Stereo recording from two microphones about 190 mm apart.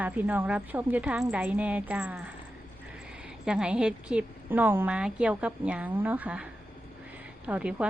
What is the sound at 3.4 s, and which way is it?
A woman's voice, 5° right (ahead or behind).